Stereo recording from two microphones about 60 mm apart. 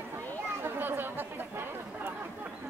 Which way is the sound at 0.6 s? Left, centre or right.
Right.